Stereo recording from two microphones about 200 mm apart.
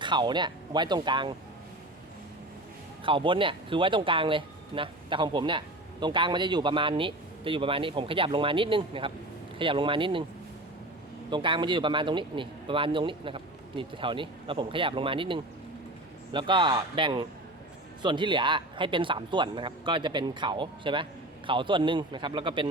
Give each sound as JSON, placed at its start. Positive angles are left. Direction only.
{"t": 0.0, "sound": "speech", "side_deg": -25}
{"t": 3.0, "sound": "speech", "side_deg": -25}
{"t": 11.3, "sound": "speech", "side_deg": -25}